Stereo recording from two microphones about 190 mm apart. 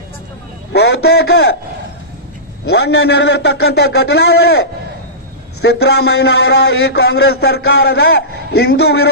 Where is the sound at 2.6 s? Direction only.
60° left (ahead or behind).